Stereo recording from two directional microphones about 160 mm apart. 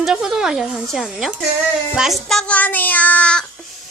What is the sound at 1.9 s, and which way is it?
Child singing, 5° right (ahead or behind).